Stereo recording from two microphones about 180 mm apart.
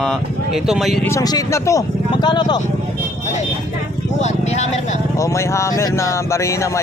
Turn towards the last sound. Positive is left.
turn(degrees=15)  # may be behind; listen again after turning